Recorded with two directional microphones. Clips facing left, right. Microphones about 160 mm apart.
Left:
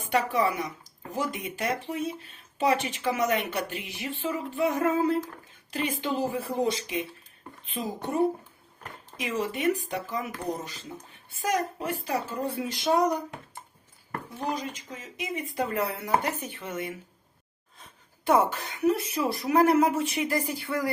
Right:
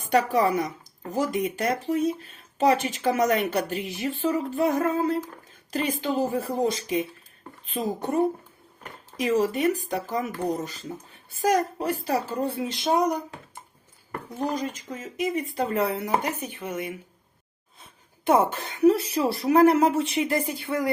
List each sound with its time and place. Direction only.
0.1 s a woman's voice: 40° right (ahead or behind)
9.1 s a woman's voice: 40° right (ahead or behind)
11.4 s a woman's voice: 40° right (ahead or behind); by 13.1 s 20° right (ahead or behind)
14.4 s speech: 45° right (ahead or behind); by 16.9 s 15° right (ahead or behind)
18.3 s speech: 25° right (ahead or behind)